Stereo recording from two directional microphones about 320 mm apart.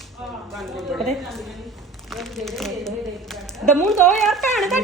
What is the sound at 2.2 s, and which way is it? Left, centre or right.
A woman's voice, centre.